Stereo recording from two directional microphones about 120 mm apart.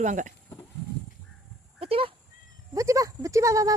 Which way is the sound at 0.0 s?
90° right.